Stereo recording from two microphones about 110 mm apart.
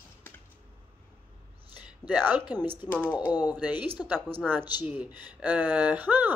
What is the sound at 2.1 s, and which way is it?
Speech, 15° right (ahead or behind).